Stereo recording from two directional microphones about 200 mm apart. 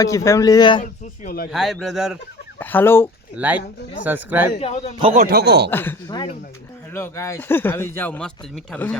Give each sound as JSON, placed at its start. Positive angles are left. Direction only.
{"t": 0.0, "sound": "a man's voice", "side_deg": 15}
{"t": 0.8, "sound": "speech", "side_deg": 45}
{"t": 1.5, "sound": "speech", "side_deg": 0}
{"t": 2.6, "sound": "a man's voice", "side_deg": 10}
{"t": 3.3, "sound": "speech", "side_deg": -5}
{"t": 4.6, "sound": "a man's voice", "side_deg": 35}
{"t": 5.1, "sound": "speech", "side_deg": -50}
{"t": 5.7, "sound": "a man's voice", "side_deg": 10}
{"t": 6.1, "sound": "a man's voice", "side_deg": 20}